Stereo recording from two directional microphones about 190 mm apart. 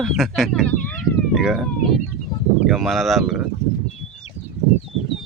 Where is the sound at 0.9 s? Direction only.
Centre (ahead or behind).